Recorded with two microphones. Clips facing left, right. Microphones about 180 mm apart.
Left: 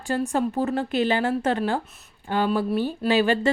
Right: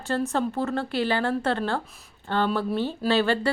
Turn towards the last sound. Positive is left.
turn(degrees=15)  # may be behind; listen again after turning